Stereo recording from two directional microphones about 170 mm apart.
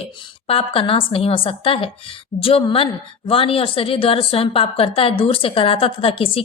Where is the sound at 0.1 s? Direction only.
30° left (ahead or behind).